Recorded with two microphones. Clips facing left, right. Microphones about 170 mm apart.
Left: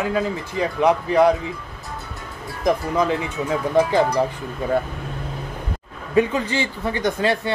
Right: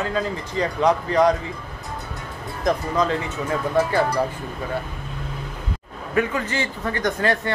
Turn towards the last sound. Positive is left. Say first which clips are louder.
# left 1 dB
turn(degrees=10)  # may be behind; listen again after turning